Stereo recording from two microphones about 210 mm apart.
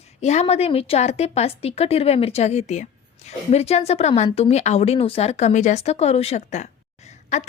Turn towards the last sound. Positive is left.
turn(degrees=30)  # may be behind; listen again after turning